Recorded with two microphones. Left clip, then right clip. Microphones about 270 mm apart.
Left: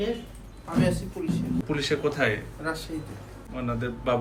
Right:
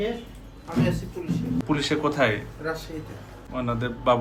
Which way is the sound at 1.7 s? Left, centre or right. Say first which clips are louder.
Right 2 dB; centre.